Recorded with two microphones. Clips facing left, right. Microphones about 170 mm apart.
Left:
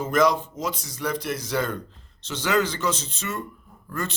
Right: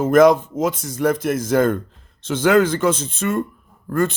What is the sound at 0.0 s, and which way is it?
Speech, 50° right (ahead or behind).